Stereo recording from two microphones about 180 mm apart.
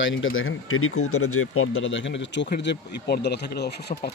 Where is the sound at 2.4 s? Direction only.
70° left (ahead or behind).